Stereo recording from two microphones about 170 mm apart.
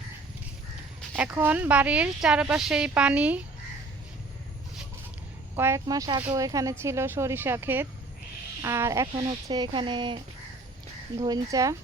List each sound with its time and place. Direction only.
1.1 s speech: 5° right (ahead or behind)
5.5 s speech: 15° right (ahead or behind)
11.2 s speech: 20° right (ahead or behind)